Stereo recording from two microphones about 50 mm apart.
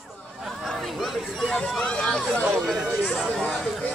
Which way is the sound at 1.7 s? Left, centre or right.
Centre.